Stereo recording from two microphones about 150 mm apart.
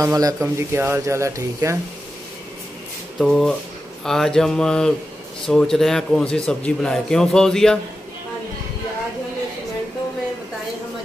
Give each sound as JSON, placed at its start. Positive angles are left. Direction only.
{"t": 0.0, "sound": "speech", "side_deg": -25}
{"t": 3.2, "sound": "a man's voice", "side_deg": 0}